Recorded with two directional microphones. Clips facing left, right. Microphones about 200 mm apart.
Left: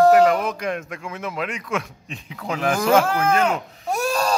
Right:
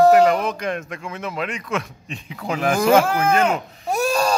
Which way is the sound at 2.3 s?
5° right (ahead or behind).